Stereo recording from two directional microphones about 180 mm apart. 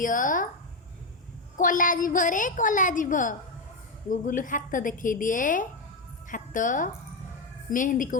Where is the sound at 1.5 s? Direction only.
45° left (ahead or behind).